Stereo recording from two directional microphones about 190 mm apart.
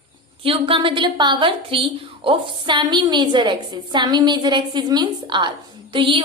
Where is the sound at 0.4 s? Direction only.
30° right (ahead or behind).